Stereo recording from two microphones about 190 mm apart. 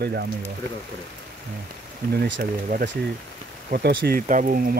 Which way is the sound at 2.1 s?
75° right (ahead or behind).